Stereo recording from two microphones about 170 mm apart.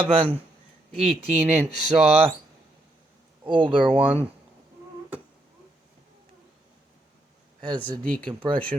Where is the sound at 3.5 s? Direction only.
30° right (ahead or behind).